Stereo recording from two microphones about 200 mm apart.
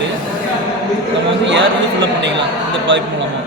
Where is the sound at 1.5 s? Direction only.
65° right (ahead or behind).